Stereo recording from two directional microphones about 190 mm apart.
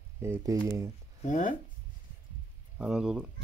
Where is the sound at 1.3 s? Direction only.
40° left (ahead or behind).